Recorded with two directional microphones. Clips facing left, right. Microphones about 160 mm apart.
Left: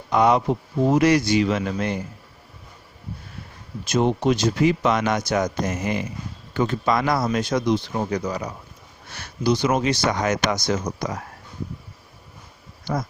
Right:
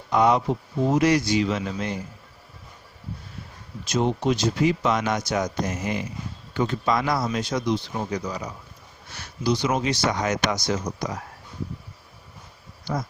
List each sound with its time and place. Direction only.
0.1 s speech: 65° left (ahead or behind)
3.8 s speech: 55° left (ahead or behind)